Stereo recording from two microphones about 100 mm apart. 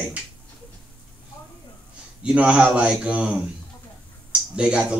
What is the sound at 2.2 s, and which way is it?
Speech, 10° right (ahead or behind).